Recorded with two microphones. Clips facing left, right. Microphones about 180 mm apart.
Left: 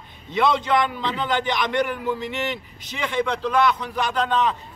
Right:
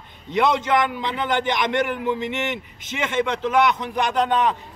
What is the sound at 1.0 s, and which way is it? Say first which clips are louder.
Speech: right 1 dB; 20° right (ahead or behind).